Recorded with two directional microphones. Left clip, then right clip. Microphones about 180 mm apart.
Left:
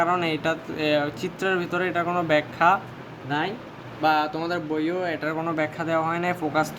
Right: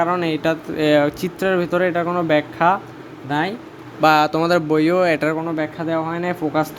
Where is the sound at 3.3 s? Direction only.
45° right (ahead or behind).